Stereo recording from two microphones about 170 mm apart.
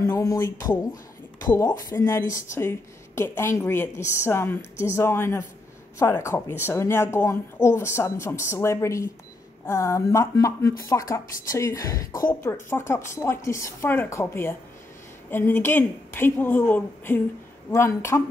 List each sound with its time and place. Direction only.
0.0 s a woman's voice: 20° left (ahead or behind)